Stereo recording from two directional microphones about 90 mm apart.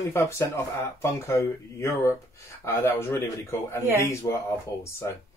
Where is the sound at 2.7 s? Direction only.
30° left (ahead or behind).